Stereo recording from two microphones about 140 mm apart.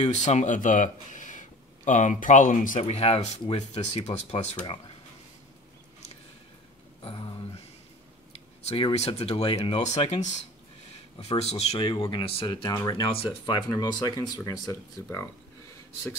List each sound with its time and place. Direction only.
0.0 s speech: 55° left (ahead or behind)
2.8 s speech: 45° left (ahead or behind)
7.0 s a sound: 35° left (ahead or behind)
8.6 s speech: 45° left (ahead or behind)
11.8 s speech: 35° left (ahead or behind)
13.1 s speech: 40° left (ahead or behind)
14.0 s speech: 30° left (ahead or behind)